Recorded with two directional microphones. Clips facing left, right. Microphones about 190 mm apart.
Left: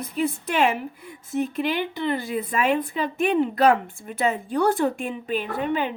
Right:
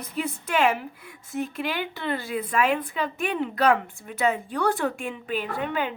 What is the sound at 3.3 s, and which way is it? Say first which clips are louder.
A woman's voice: left 3 dB; 35° left (ahead or behind).